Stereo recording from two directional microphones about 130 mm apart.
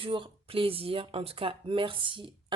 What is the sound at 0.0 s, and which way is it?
Speech, 40° right (ahead or behind).